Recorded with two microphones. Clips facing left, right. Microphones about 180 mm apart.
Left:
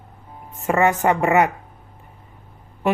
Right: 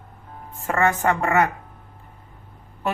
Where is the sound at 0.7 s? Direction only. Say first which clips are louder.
Left 3 dB; 15° left (ahead or behind).